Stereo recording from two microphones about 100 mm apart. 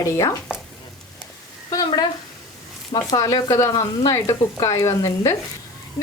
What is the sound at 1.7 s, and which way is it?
Speech, 40° left (ahead or behind).